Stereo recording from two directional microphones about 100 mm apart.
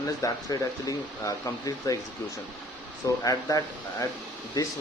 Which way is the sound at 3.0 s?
35° left (ahead or behind).